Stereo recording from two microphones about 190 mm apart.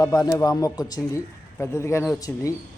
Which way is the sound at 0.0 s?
20° left (ahead or behind).